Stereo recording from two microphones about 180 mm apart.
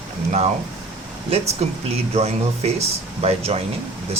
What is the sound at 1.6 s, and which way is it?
Speech, 40° right (ahead or behind).